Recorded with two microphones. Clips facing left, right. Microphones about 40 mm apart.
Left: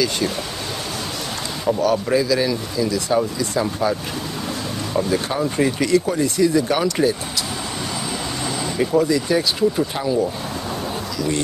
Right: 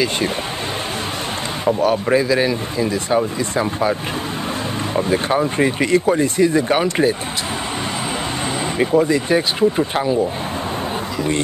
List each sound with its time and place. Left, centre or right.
1.8 s speech: right
4.9 s speech: right
8.7 s speech: right